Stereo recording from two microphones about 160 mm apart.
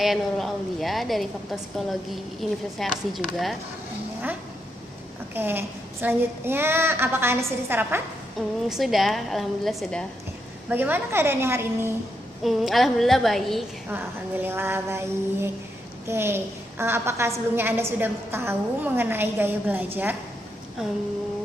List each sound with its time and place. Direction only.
0.0 s a woman's voice: centre (ahead or behind)
5.3 s a woman's voice: 15° right (ahead or behind)
8.6 s a woman's voice: centre (ahead or behind)
10.7 s a woman's voice: 10° right (ahead or behind)
12.4 s a woman's voice: centre (ahead or behind)
14.4 s a woman's voice: 15° right (ahead or behind)